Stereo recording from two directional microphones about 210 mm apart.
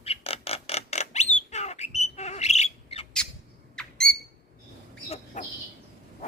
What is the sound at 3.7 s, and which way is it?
Squawk, 5° left (ahead or behind).